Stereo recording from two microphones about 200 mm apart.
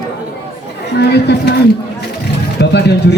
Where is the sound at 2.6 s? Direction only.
60° left (ahead or behind).